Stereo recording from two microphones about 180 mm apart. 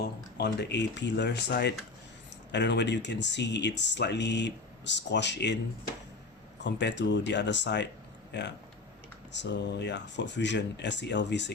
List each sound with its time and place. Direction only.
0.3 s speech: 70° left (ahead or behind)
6.6 s speech: 75° left (ahead or behind)